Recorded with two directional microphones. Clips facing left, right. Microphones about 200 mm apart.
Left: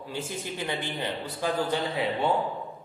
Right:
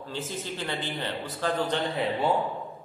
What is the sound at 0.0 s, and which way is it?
A man's voice, 10° left (ahead or behind).